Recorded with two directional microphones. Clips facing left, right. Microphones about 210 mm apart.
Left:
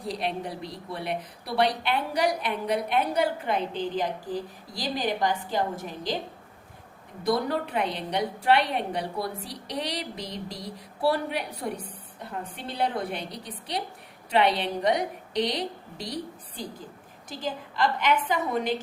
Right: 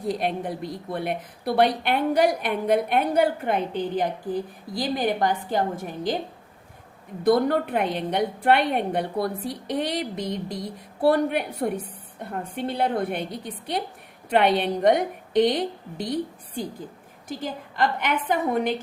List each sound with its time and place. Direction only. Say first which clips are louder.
0.1 s a woman's voice: right 4 dB; 50° right (ahead or behind)
7.3 s a woman's voice: right 6 dB; 55° right (ahead or behind)
17.2 s a woman's voice: right 2 dB; 55° right (ahead or behind)